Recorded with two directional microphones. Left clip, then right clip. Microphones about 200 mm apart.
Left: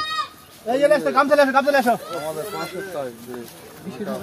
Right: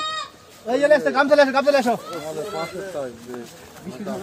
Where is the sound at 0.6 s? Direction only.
5° left (ahead or behind).